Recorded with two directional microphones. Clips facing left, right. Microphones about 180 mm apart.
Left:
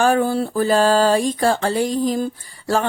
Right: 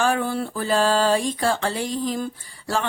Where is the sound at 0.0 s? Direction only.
40° left (ahead or behind).